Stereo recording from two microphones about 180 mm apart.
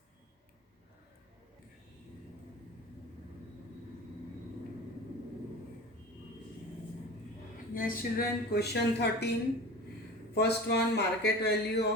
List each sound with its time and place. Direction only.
7.7 s a woman's voice: 50° left (ahead or behind)
10.3 s a man's voice: 65° left (ahead or behind)